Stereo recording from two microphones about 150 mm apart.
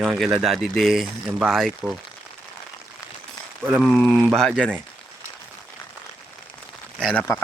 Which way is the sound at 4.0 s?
5° left (ahead or behind).